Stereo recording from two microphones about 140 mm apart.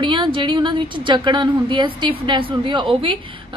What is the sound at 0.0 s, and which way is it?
A woman's voice, 35° right (ahead or behind).